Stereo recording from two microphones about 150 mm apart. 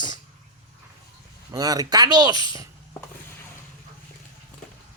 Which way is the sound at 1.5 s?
25° right (ahead or behind).